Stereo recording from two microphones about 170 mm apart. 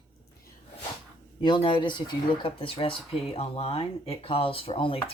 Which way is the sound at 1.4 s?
30° left (ahead or behind).